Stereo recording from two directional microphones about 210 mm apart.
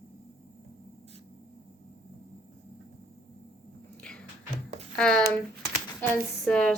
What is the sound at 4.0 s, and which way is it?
Music, 5° left (ahead or behind).